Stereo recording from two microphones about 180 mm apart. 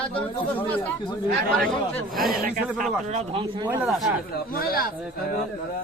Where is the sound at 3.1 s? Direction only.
35° right (ahead or behind).